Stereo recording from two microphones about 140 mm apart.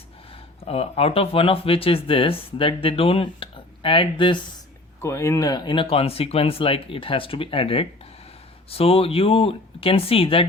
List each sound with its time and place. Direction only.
0.6 s speech: 45° left (ahead or behind)
5.0 s speech: 20° left (ahead or behind); by 10.4 s 40° left (ahead or behind)